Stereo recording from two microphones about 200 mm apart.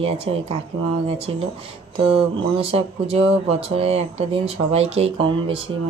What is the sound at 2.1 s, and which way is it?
Speech, 30° right (ahead or behind).